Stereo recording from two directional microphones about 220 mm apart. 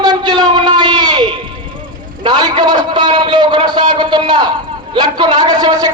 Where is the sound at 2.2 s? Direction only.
20° right (ahead or behind).